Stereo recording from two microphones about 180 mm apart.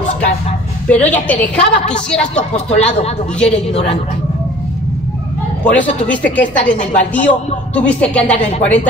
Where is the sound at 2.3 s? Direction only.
35° left (ahead or behind).